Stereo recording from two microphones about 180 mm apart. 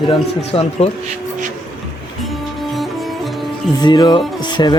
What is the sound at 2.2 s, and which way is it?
Music, centre (ahead or behind).